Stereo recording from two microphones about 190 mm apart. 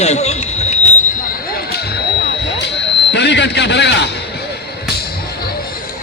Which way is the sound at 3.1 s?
65° left (ahead or behind).